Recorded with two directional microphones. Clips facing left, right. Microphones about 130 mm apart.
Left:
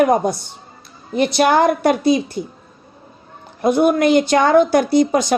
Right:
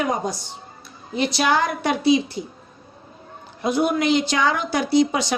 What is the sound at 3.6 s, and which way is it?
A woman's voice, 55° left (ahead or behind).